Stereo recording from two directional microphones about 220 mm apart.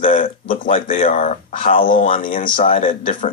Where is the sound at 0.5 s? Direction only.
35° left (ahead or behind).